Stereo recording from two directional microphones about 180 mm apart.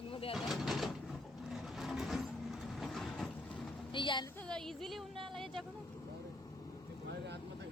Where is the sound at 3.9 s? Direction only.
25° left (ahead or behind).